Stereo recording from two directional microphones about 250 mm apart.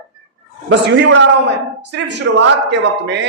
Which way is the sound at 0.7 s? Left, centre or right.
Right.